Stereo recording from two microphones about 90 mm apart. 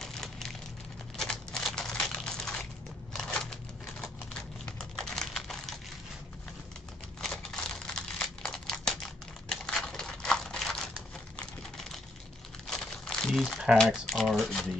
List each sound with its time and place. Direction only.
0.0 s a sound: 5° left (ahead or behind)
4.0 s typewriter: 10° left (ahead or behind)
4.7 s typing: 5° left (ahead or behind)
7.2 s crumpling: 5° left (ahead or behind)
11.3 s a sound: 5° left (ahead or behind)
12.6 s crumpling: 5° left (ahead or behind)
13.7 s speech: centre (ahead or behind)